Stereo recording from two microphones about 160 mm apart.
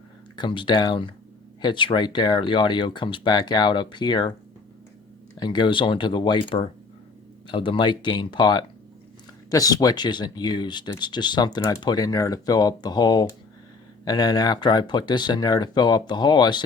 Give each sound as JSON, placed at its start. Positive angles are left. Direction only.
{"t": 0.3, "sound": "speech", "side_deg": 30}
{"t": 5.4, "sound": "speech", "side_deg": 25}
{"t": 7.4, "sound": "speech", "side_deg": 30}